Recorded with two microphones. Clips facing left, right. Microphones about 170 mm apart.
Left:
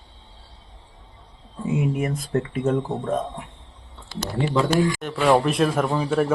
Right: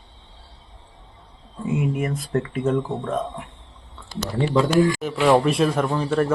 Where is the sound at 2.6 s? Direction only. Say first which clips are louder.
Even; 45° left (ahead or behind).